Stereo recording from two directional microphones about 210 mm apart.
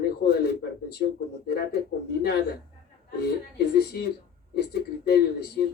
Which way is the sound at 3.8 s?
50° left (ahead or behind).